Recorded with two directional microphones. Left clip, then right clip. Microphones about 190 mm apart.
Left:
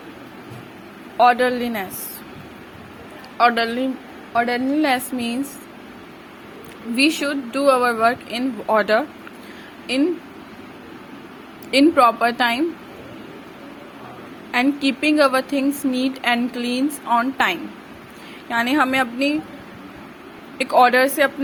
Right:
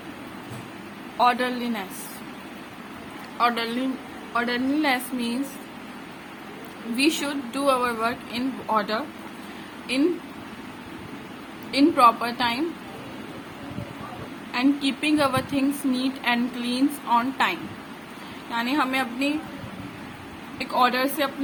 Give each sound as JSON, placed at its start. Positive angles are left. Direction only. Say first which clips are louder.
{"t": 1.2, "sound": "a woman's voice", "louder": "left 6 dB", "side_deg": 25}
{"t": 3.3, "sound": "a woman's voice", "louder": "left 6 dB", "side_deg": 30}
{"t": 6.9, "sound": "a woman's voice", "louder": "left 5 dB", "side_deg": 25}
{"t": 11.7, "sound": "a woman's voice", "louder": "left 3 dB", "side_deg": 35}
{"t": 14.5, "sound": "a woman's voice", "louder": "left 4 dB", "side_deg": 35}
{"t": 20.6, "sound": "a woman's voice", "louder": "left 8 dB", "side_deg": 35}